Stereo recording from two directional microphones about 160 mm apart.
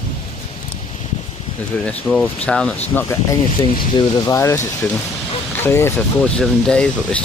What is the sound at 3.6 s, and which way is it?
Speech, 25° left (ahead or behind).